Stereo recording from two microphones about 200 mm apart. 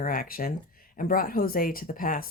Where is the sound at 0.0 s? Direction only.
45° left (ahead or behind).